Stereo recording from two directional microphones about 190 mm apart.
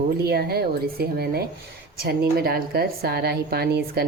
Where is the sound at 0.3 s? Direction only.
55° right (ahead or behind).